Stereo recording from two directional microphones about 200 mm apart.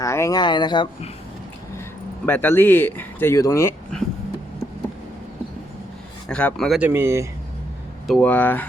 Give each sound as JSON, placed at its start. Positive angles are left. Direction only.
{"t": 0.0, "sound": "speech", "side_deg": 15}
{"t": 2.2, "sound": "speech", "side_deg": 10}
{"t": 6.2, "sound": "speech", "side_deg": 5}
{"t": 8.0, "sound": "speech", "side_deg": 5}